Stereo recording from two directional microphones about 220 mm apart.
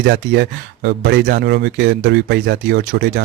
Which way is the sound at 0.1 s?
50° right (ahead or behind).